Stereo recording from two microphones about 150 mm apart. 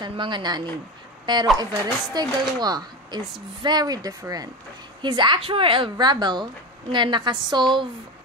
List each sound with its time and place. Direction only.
0.0 s speech: 30° right (ahead or behind)